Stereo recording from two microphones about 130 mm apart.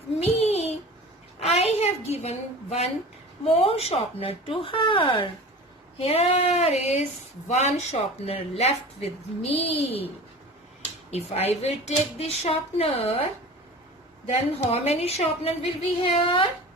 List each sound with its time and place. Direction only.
0.2 s a sound: 55° left (ahead or behind)
1.4 s a woman's voice: 55° left (ahead or behind)
6.0 s speech: 50° left (ahead or behind)
11.1 s speech: 55° left (ahead or behind)
14.7 s speech: 50° left (ahead or behind)